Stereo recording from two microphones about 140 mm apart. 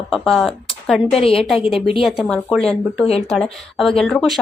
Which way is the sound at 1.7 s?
40° left (ahead or behind).